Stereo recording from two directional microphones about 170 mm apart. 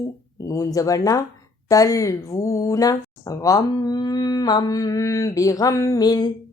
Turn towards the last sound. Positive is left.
turn(degrees=25)  # may be behind; listen again after turning